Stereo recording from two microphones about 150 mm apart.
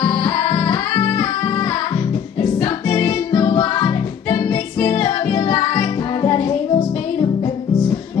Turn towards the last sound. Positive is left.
turn(degrees=25)  # may be behind; listen again after turning